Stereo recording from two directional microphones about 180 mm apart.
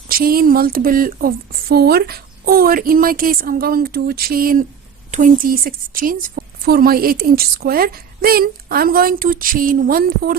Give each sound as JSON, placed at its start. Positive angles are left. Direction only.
{"t": 0.1, "sound": "a woman's voice", "side_deg": -55}